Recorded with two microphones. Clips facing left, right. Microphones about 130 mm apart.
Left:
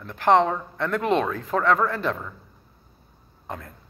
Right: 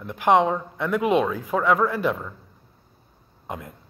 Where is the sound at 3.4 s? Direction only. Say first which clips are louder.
Right 2 dB; 15° right (ahead or behind).